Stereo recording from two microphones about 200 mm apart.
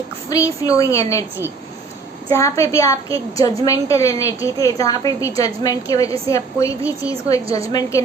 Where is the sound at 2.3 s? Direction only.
15° left (ahead or behind).